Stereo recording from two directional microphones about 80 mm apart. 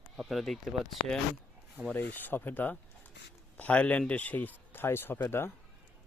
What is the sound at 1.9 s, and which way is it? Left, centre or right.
Speech, left.